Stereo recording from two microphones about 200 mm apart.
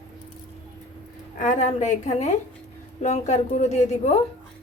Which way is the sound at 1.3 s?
40° left (ahead or behind).